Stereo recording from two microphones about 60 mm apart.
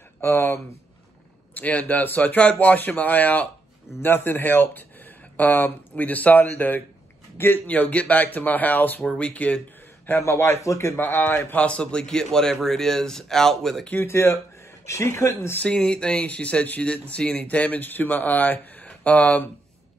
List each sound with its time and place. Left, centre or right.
0.2 s a man's voice: left
1.5 s speech: left
10.2 s speech: left
10.6 s speech: left
11.0 s a man's voice: left
11.5 s a man's voice: centre
13.9 s speech: left
15.7 s speech: centre